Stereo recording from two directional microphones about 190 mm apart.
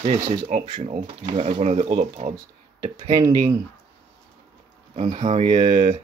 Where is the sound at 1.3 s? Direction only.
30° right (ahead or behind).